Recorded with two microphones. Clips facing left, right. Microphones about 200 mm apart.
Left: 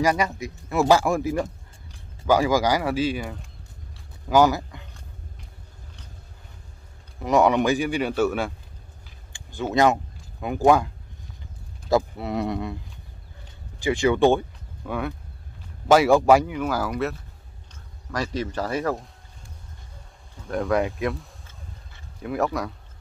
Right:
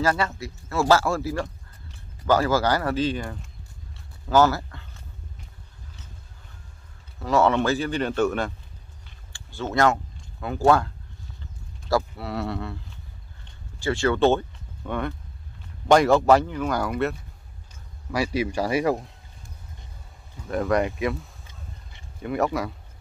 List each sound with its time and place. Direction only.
0.0 s speech: 15° left (ahead or behind)
1.4 s speech: 5° left (ahead or behind)
7.2 s speech: 15° left (ahead or behind)
11.9 s speech: 20° left (ahead or behind)
13.7 s speech: 15° left (ahead or behind); by 19.0 s 10° right (ahead or behind)
20.4 s speech: centre (ahead or behind)